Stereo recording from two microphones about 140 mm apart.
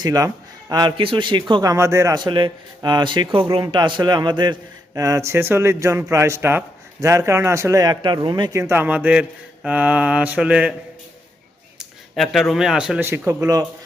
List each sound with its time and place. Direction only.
0.0 s a man's voice: 25° right (ahead or behind)
1.7 s a man's voice: 20° right (ahead or behind)
9.6 s mantra: 10° right (ahead or behind)
11.8 s speech: centre (ahead or behind)